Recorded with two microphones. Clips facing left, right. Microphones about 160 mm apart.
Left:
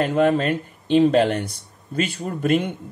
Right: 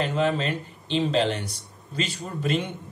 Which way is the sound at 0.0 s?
50° left (ahead or behind).